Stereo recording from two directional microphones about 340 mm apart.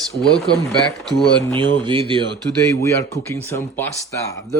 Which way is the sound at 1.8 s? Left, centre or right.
Centre.